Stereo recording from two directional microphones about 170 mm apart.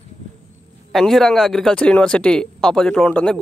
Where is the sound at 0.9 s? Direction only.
Centre (ahead or behind).